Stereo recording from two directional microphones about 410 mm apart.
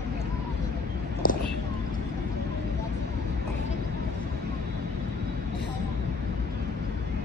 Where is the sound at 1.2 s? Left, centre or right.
Left.